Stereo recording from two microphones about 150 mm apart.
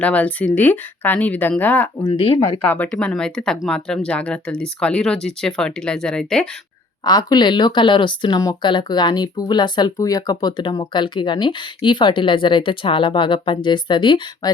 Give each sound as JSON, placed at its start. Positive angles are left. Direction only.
{"t": 0.0, "sound": "speech", "side_deg": 10}
{"t": 2.0, "sound": "speech", "side_deg": 40}
{"t": 2.6, "sound": "speech", "side_deg": 10}
{"t": 7.0, "sound": "speech", "side_deg": 25}